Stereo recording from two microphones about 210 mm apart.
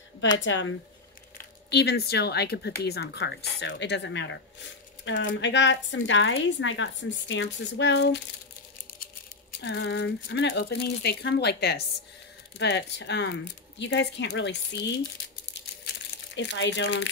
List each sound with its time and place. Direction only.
0.4 s a woman's voice: 60° left (ahead or behind)
9.6 s a woman's voice: 55° left (ahead or behind)
16.3 s a woman's voice: 60° left (ahead or behind)